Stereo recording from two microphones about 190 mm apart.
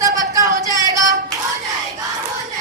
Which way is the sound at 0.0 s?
15° right (ahead or behind).